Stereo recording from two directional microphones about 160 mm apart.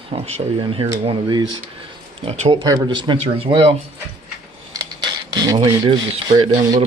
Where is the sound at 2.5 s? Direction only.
30° right (ahead or behind).